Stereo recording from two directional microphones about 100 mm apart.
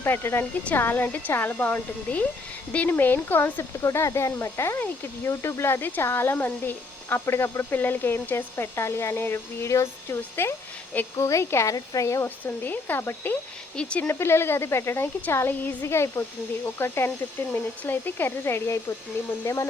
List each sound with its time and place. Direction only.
0.0 s speech: 25° left (ahead or behind)
13.7 s speech: 10° left (ahead or behind)
14.1 s speech: 25° left (ahead or behind)